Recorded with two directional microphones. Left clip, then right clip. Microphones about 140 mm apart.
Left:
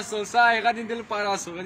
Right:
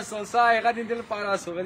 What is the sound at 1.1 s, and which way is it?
Speech, 25° right (ahead or behind).